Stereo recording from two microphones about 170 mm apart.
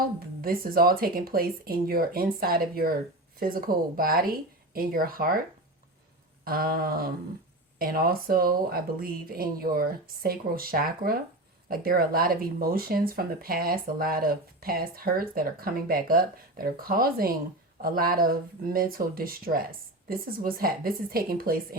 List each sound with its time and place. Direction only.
0.2 s speech: 60° right (ahead or behind)
6.4 s speech: 60° right (ahead or behind)